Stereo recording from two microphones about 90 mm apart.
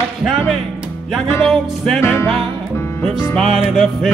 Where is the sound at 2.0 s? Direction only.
30° left (ahead or behind).